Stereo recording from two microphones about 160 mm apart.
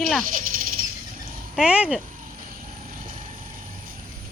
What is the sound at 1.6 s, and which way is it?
Speech, 5° right (ahead or behind).